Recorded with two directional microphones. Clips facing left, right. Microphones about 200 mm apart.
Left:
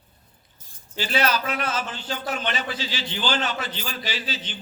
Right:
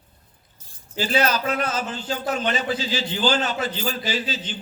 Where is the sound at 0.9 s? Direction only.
40° right (ahead or behind).